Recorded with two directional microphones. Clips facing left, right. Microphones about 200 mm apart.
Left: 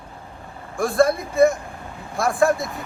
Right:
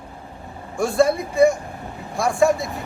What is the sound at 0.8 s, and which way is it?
Speech, centre (ahead or behind).